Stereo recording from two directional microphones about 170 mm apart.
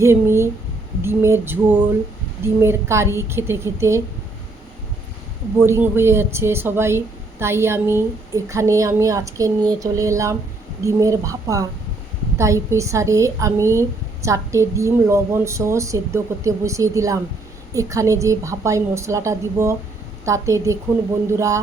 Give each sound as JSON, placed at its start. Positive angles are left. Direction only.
{"t": 0.0, "sound": "a woman's voice", "side_deg": -15}
{"t": 5.5, "sound": "a woman's voice", "side_deg": -15}